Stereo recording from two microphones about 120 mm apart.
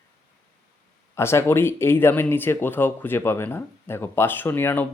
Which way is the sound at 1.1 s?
20° left (ahead or behind).